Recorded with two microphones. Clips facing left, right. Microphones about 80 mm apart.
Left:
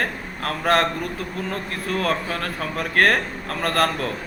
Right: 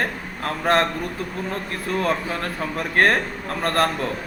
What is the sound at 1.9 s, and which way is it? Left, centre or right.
A man's voice, right.